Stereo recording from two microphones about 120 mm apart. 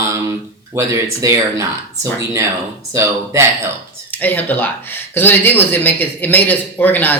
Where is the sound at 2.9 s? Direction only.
25° right (ahead or behind).